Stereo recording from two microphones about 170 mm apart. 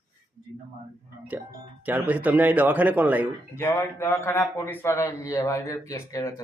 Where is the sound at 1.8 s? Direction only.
10° right (ahead or behind).